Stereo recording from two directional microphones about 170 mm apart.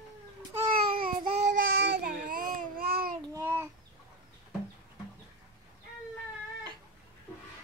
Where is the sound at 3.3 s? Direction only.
15° right (ahead or behind).